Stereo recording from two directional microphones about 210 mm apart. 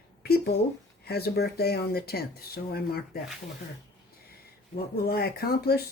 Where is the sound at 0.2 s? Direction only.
50° left (ahead or behind).